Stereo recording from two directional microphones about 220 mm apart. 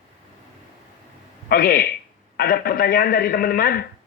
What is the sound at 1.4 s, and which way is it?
Speech, 45° left (ahead or behind).